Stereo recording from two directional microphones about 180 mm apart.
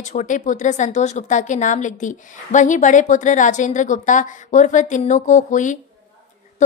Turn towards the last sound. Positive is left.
turn(degrees=45)  # may be behind; listen again after turning